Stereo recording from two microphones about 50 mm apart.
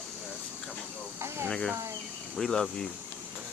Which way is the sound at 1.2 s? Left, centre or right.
Right.